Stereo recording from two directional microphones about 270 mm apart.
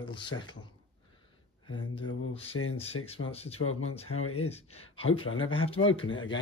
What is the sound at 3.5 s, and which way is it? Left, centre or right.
Speech, left.